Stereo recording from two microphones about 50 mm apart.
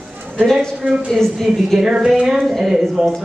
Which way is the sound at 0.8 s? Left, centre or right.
Right.